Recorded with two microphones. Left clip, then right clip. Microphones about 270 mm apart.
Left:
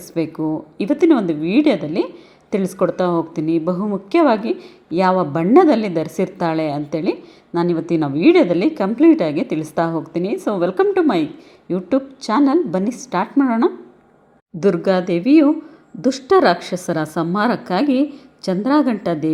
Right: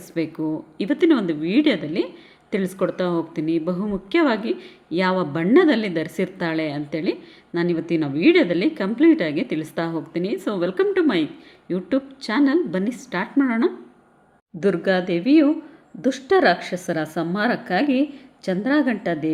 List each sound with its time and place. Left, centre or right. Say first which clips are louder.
0.4 s a woman's voice: left 4 dB; centre
3.6 s a woman's voice: left 5 dB; centre
14.8 s a woman's voice: left 4 dB; centre